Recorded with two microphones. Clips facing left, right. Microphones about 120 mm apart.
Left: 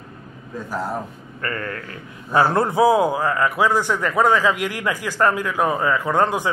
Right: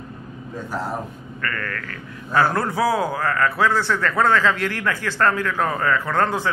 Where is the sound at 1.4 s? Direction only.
25° left (ahead or behind).